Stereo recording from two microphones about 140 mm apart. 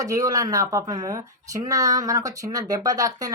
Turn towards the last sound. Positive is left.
turn(degrees=-25)  # may be behind; listen again after turning